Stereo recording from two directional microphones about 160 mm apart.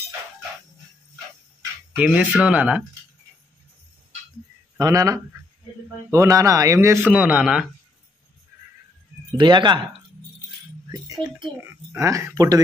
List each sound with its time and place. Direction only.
2.0 s speech: 10° right (ahead or behind)
4.7 s a man's voice: 20° right (ahead or behind); by 7.6 s 5° right (ahead or behind)
9.4 s a man's voice: 30° right (ahead or behind)
10.9 s a man's voice: 25° right (ahead or behind)